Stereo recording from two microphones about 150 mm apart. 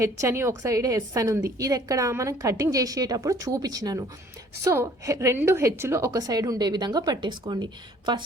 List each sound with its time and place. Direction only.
0.0 s a woman's voice: 20° right (ahead or behind)